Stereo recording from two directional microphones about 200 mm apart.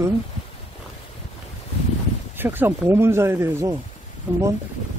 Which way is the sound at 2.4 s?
10° right (ahead or behind).